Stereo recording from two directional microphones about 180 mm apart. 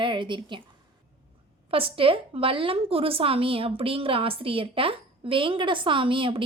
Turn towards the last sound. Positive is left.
turn(degrees=-30)  # may be behind; listen again after turning